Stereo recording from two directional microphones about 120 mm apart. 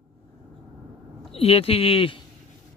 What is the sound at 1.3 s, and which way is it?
Speech, 55° left (ahead or behind).